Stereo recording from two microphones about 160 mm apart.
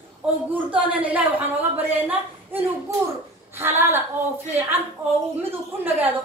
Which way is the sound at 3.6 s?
15° right (ahead or behind).